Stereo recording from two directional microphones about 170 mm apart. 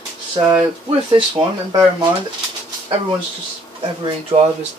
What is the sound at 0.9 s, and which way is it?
Speech, 30° right (ahead or behind).